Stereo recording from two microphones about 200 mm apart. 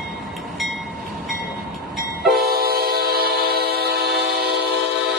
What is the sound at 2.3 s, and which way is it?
Vehicle, 50° right (ahead or behind).